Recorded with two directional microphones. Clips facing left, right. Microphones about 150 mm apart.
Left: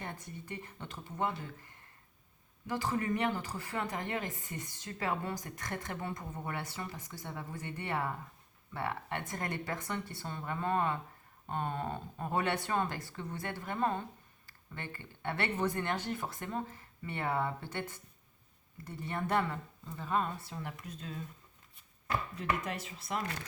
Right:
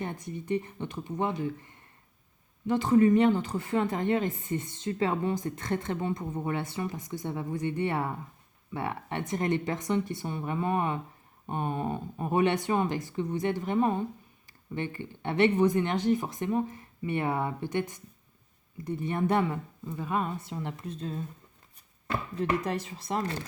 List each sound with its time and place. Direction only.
0.0 s a woman's voice: 20° right (ahead or behind)
22.0 s chopping: 35° right (ahead or behind)